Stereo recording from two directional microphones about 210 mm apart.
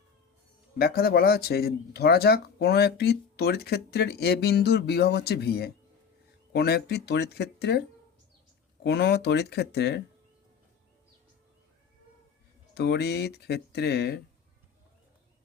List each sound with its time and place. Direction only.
0.8 s speech: 45° left (ahead or behind)
12.7 s speech: 50° left (ahead or behind)